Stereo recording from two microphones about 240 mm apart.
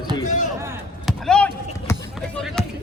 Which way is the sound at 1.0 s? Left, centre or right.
Centre.